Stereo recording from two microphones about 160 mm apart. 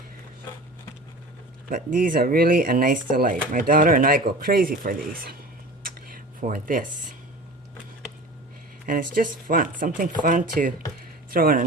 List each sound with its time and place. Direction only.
1.7 s speech: 60° right (ahead or behind)
5.8 s a sound: 60° right (ahead or behind)
8.9 s speech: 60° right (ahead or behind)